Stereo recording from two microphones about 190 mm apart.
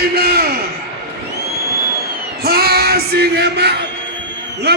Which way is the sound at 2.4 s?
55° right (ahead or behind).